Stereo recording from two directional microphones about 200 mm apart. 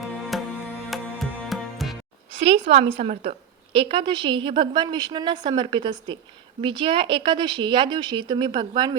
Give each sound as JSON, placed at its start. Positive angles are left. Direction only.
{"t": 0.0, "sound": "music", "side_deg": 0}
{"t": 2.4, "sound": "a woman's voice", "side_deg": -30}